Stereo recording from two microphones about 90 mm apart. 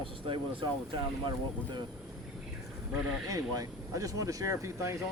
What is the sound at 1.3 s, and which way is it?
Speech, 55° right (ahead or behind).